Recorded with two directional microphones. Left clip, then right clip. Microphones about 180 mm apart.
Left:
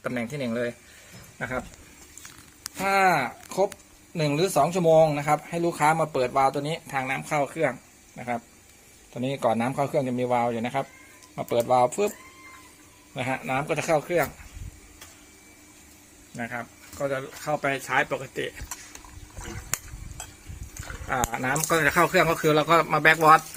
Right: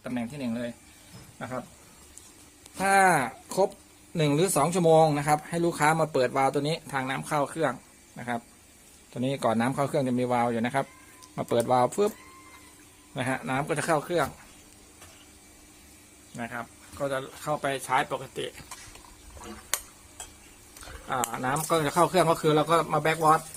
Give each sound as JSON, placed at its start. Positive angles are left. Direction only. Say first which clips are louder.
{"t": 0.0, "sound": "speech", "louder": "left 4 dB", "side_deg": 45}
{"t": 2.8, "sound": "speech", "louder": "even", "side_deg": -25}
{"t": 13.1, "sound": "speech", "louder": "left 2 dB", "side_deg": -25}
{"t": 16.4, "sound": "speech", "louder": "left 2 dB", "side_deg": 5}
{"t": 19.7, "sound": "a sound", "louder": "right 1 dB", "side_deg": -10}
{"t": 21.3, "sound": "speech", "louder": "left 2 dB", "side_deg": 0}
{"t": 22.4, "sound": "speech", "louder": "left 3 dB", "side_deg": 0}